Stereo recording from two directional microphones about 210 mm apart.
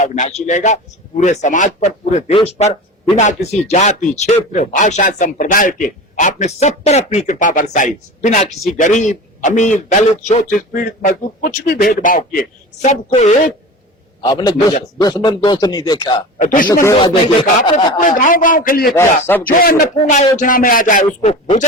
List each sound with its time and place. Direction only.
0.0 s speech: 35° left (ahead or behind)
14.2 s a man's voice: 20° left (ahead or behind)
16.4 s speech: 40° left (ahead or behind)
16.8 s speech: 20° left (ahead or behind)
18.2 s speech: 40° left (ahead or behind)
21.2 s speech: 30° left (ahead or behind)